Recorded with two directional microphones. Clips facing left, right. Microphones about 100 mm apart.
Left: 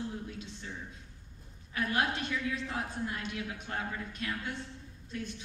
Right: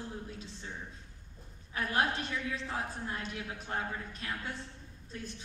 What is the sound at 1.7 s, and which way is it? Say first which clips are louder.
A man's voice: even; 35° right (ahead or behind).